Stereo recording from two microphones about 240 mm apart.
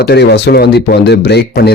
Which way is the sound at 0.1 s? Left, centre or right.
Left.